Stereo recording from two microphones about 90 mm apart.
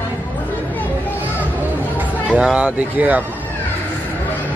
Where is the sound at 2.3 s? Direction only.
15° right (ahead or behind).